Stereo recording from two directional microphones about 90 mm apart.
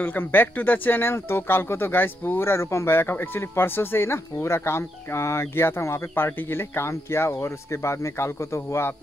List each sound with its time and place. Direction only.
0.0 s speech: 20° left (ahead or behind)